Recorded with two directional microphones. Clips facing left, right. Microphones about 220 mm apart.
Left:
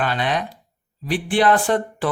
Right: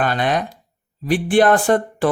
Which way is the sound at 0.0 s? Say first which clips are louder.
Right 3 dB; 45° right (ahead or behind).